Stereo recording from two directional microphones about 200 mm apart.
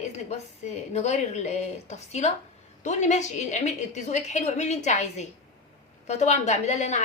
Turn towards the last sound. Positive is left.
turn(degrees=35)  # may be behind; listen again after turning